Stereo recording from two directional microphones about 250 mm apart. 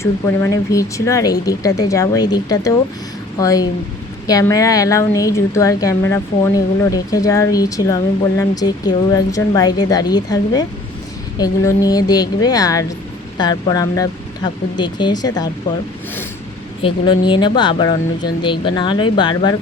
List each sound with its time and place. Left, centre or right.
0.0 s speech: centre
16.8 s speech: centre